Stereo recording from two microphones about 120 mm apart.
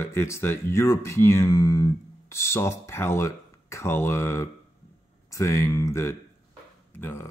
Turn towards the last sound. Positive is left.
turn(degrees=20)  # may be behind; listen again after turning